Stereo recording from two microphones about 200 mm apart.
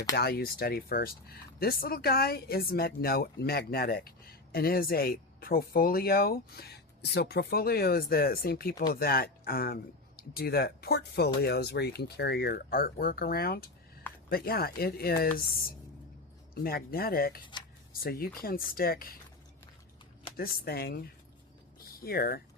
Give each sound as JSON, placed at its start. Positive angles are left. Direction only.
{"t": 0.2, "sound": "speech", "side_deg": 50}
{"t": 16.6, "sound": "speech", "side_deg": 50}
{"t": 20.3, "sound": "speech", "side_deg": 50}
{"t": 21.8, "sound": "a sound", "side_deg": 50}